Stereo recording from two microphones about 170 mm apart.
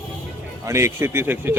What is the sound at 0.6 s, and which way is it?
Speech, 15° right (ahead or behind).